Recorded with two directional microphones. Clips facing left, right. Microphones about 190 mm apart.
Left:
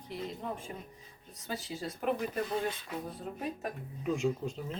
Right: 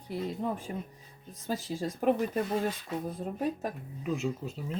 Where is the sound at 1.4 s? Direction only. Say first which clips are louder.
Right 5 dB; 40° right (ahead or behind).